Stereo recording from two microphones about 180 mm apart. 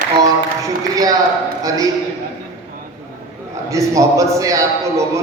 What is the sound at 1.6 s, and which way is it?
Speech, 20° right (ahead or behind).